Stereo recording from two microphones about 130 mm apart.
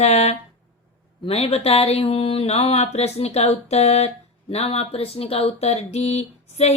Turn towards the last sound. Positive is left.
turn(degrees=55)  # may be behind; listen again after turning